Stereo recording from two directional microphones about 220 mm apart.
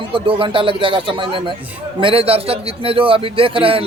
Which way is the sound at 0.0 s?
25° right (ahead or behind).